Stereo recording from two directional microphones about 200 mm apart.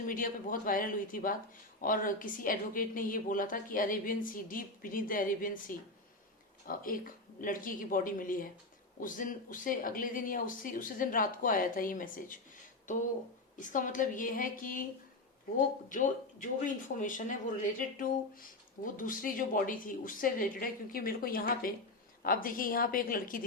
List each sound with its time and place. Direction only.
0.1 s speech: 45° left (ahead or behind)
13.6 s speech: 40° left (ahead or behind)
15.9 s speech: 40° left (ahead or behind)